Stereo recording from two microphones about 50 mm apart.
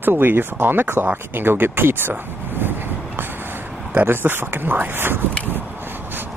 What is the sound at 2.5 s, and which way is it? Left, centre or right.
Vehicle, right.